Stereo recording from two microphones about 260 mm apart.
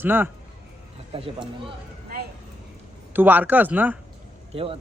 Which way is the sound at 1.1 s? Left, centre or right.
Centre.